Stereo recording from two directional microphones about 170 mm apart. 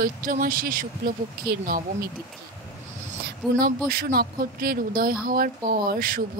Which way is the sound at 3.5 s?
60° right (ahead or behind).